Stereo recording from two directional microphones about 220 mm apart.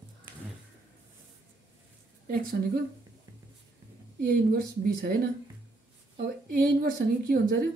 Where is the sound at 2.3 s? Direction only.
40° right (ahead or behind).